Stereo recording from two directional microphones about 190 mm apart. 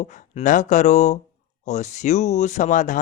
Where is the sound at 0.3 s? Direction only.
40° left (ahead or behind).